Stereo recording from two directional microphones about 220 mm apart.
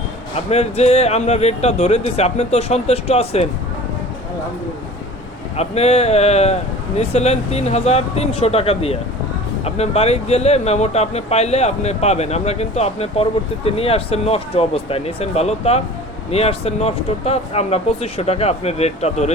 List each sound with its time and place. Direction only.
0.5 s speech: 30° left (ahead or behind)
5.5 s speech: 30° left (ahead or behind)